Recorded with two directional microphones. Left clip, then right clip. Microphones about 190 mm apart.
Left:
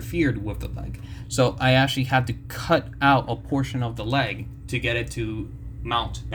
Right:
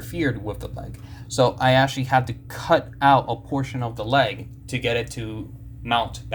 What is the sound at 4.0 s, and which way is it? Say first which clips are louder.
Speech: right 6 dB; 15° right (ahead or behind).